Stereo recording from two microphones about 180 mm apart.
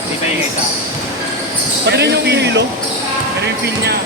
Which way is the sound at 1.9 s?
70° right (ahead or behind).